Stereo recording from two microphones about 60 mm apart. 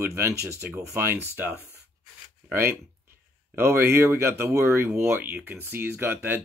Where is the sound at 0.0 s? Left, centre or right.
Right.